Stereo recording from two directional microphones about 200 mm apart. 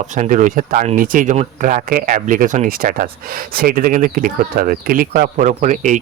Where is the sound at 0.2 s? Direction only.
40° right (ahead or behind).